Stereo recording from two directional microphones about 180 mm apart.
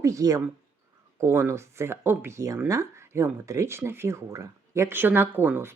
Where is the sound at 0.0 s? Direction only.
20° right (ahead or behind).